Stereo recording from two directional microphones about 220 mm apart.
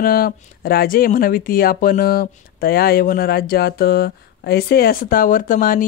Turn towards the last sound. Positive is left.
turn(degrees=40)  # may be behind; listen again after turning